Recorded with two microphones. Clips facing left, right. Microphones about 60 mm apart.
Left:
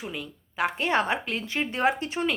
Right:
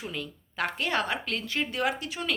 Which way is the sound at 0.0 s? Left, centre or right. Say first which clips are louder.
Left 1 dB; centre.